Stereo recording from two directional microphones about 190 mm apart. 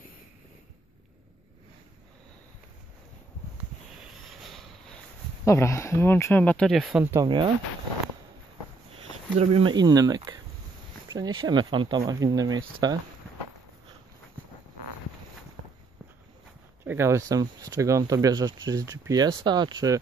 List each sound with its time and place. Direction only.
4.6 s a sound: 5° left (ahead or behind)
5.4 s speech: 15° left (ahead or behind); by 7.2 s 10° right (ahead or behind)
7.2 s speech: 25° right (ahead or behind)
9.4 s speech: 30° right (ahead or behind)
16.8 s speech: 15° right (ahead or behind)